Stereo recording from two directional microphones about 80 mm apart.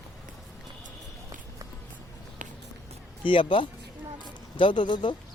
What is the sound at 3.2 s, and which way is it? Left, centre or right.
Speech, left.